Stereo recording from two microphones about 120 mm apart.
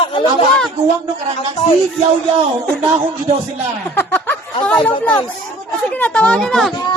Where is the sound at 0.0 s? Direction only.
45° left (ahead or behind).